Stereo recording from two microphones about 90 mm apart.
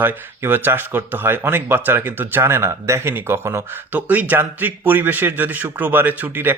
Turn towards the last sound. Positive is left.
turn(degrees=-20)  # may be behind; listen again after turning